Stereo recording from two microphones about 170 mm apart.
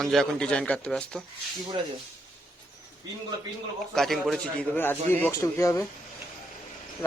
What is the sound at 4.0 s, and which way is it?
A man's voice, centre (ahead or behind).